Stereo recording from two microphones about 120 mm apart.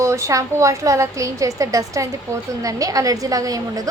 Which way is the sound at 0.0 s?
25° right (ahead or behind).